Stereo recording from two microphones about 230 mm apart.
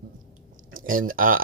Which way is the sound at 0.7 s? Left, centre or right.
Right.